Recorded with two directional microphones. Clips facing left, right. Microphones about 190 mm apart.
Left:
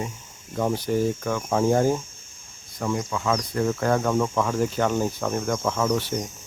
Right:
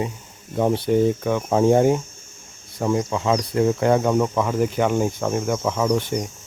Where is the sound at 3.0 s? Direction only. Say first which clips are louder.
Right 4 dB; 30° right (ahead or behind).